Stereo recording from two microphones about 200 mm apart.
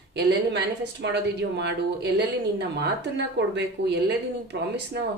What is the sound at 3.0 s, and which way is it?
Speech, 60° right (ahead or behind).